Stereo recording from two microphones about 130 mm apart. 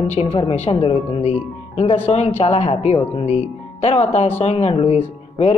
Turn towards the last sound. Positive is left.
turn(degrees=55)  # may be behind; listen again after turning